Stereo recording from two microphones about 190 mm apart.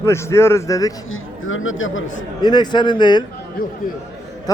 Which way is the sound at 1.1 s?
90° left.